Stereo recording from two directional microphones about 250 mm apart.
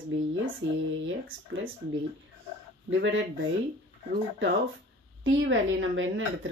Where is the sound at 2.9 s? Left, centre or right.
Right.